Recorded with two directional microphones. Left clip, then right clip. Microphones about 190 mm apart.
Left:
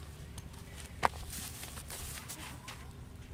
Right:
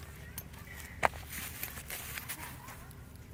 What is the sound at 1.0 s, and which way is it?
Walk, 25° right (ahead or behind).